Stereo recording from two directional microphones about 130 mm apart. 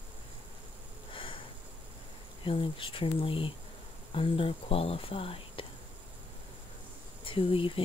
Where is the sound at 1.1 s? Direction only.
40° left (ahead or behind).